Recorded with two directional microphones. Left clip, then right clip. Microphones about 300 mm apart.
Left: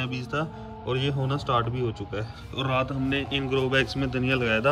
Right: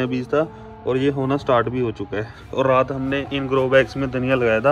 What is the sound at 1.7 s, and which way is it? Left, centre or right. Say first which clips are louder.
Speech: right 7 dB; right.